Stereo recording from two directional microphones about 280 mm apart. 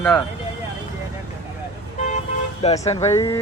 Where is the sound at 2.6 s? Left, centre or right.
Left.